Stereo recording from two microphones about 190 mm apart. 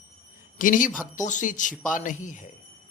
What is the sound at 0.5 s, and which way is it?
A man's voice, 45° left (ahead or behind).